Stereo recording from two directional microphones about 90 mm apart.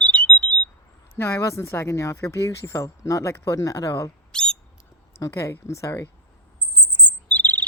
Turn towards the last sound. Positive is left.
turn(degrees=20)  # may be behind; listen again after turning